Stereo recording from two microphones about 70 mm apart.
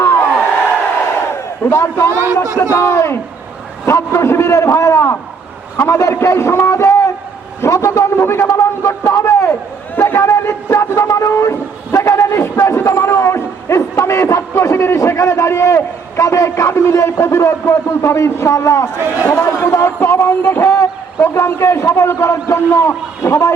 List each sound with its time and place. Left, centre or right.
0.0 s crowd: left
1.7 s a man's voice: left